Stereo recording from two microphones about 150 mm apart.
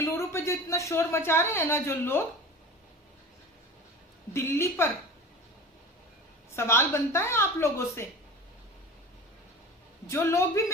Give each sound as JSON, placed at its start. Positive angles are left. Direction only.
{"t": 0.0, "sound": "speech", "side_deg": 20}
{"t": 4.4, "sound": "a woman's voice", "side_deg": 15}
{"t": 6.6, "sound": "a woman's voice", "side_deg": 15}
{"t": 10.1, "sound": "a woman's voice", "side_deg": 15}